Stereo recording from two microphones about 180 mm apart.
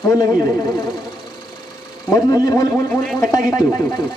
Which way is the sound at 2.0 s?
20° left (ahead or behind).